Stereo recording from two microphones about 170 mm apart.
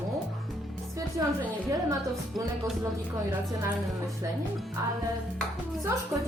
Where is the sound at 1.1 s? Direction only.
20° right (ahead or behind).